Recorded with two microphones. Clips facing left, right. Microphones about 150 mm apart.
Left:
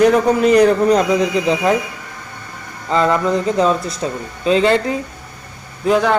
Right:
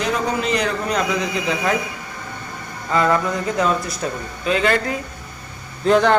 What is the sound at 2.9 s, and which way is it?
A man's voice, 25° left (ahead or behind).